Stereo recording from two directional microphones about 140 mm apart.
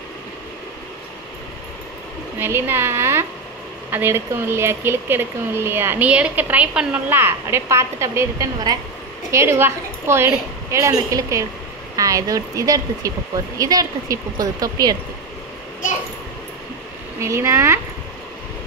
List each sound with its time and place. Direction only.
2.3 s a woman's voice: 15° right (ahead or behind)
17.2 s a woman's voice: 20° right (ahead or behind)